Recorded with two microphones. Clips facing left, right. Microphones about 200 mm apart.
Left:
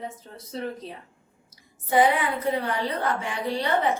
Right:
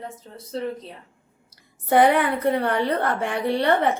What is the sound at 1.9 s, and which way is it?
A woman's voice, 60° right (ahead or behind).